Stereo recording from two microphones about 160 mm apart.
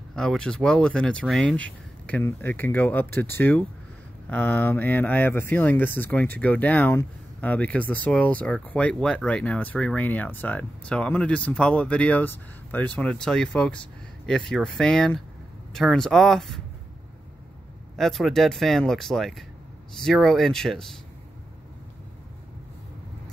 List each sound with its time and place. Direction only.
0.1 s speech: 5° left (ahead or behind)
17.9 s speech: centre (ahead or behind)